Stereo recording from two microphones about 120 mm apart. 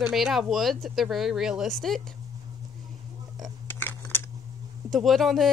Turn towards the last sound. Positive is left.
turn(degrees=0)  # may be behind; listen again after turning